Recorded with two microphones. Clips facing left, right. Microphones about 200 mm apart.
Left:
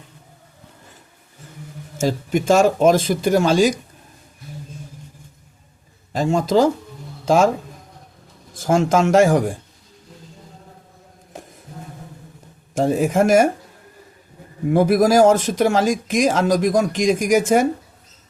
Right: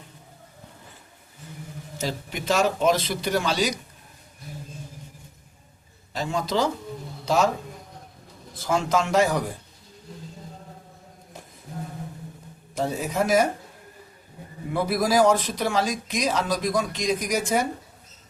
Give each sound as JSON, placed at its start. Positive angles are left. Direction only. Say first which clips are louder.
{"t": 2.0, "sound": "speech", "louder": "left 11 dB", "side_deg": 45}
{"t": 6.1, "sound": "a man's voice", "louder": "left 9 dB", "side_deg": 45}
{"t": 8.5, "sound": "speech", "louder": "left 7 dB", "side_deg": 45}
{"t": 12.7, "sound": "speech", "louder": "left 9 dB", "side_deg": 50}
{"t": 14.7, "sound": "speech", "louder": "left 8 dB", "side_deg": 45}